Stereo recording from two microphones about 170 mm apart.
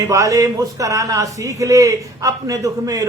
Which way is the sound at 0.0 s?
20° right (ahead or behind).